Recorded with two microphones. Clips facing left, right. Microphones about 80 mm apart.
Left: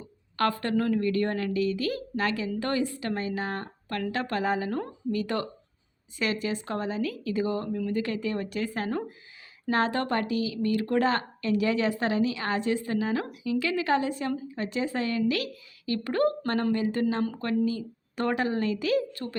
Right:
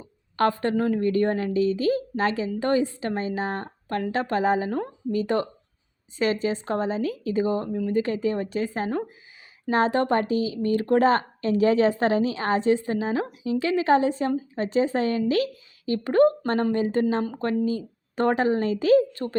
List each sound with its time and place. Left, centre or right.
0.3 s a woman's voice: right